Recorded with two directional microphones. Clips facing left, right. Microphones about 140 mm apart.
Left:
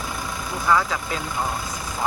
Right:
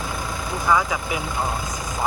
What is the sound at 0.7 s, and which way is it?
Speech, 15° right (ahead or behind).